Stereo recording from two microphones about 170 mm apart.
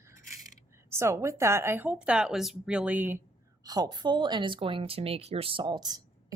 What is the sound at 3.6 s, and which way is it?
Speech, 25° right (ahead or behind).